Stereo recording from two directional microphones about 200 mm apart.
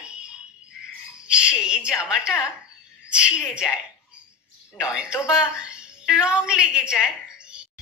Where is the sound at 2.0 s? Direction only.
5° right (ahead or behind).